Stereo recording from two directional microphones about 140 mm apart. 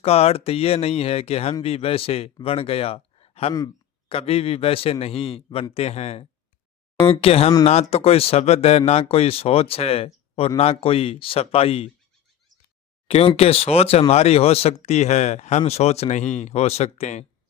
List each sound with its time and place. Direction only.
0.0 s a man's voice: 45° left (ahead or behind)
13.1 s speech: 45° left (ahead or behind)